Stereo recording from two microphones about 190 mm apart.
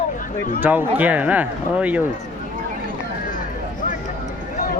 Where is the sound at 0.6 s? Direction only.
10° right (ahead or behind).